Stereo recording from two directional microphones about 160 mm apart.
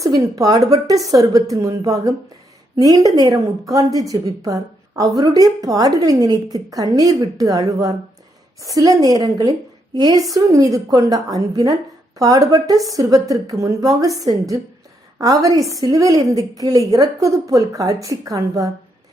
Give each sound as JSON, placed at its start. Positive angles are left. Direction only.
{"t": 0.0, "sound": "a woman's voice", "side_deg": -20}